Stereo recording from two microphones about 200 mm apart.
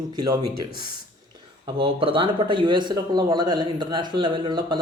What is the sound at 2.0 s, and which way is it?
A man's voice, 25° right (ahead or behind).